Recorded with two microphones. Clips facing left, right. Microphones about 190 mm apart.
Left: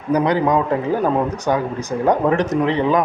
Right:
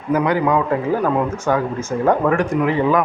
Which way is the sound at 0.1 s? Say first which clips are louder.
Even; 25° left (ahead or behind).